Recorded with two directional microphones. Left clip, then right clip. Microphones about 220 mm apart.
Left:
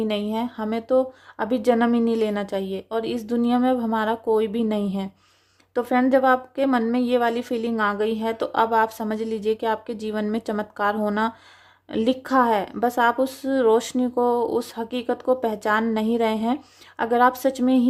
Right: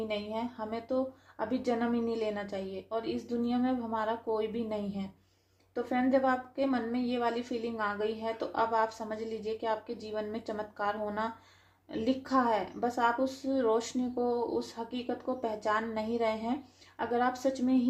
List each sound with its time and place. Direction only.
0.1 s a woman's voice: 45° left (ahead or behind)